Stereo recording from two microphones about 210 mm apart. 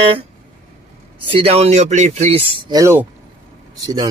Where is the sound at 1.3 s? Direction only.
30° right (ahead or behind).